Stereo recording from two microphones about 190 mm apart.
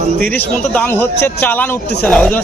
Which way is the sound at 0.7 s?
10° left (ahead or behind).